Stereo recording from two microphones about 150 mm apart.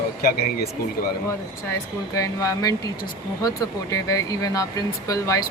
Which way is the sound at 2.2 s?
25° left (ahead or behind).